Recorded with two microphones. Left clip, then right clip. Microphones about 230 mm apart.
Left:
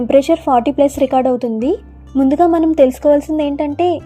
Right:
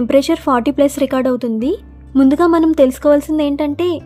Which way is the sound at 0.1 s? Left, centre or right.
Centre.